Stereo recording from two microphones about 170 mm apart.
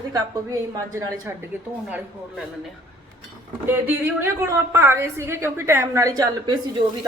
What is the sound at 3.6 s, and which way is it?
A woman's voice, 10° right (ahead or behind).